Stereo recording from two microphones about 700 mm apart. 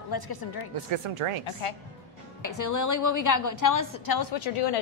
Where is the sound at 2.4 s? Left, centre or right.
Left.